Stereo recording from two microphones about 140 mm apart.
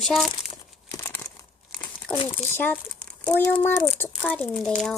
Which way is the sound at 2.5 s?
10° left (ahead or behind).